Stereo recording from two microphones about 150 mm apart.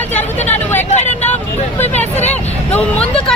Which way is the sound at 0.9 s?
50° left (ahead or behind).